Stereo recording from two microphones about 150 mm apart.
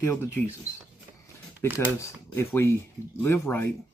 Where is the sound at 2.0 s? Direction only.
15° left (ahead or behind).